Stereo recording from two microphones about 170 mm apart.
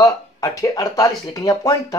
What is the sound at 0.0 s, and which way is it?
Speech, 20° left (ahead or behind).